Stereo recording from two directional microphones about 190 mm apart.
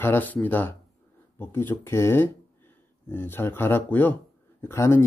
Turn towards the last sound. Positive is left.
turn(degrees=15)  # may be behind; listen again after turning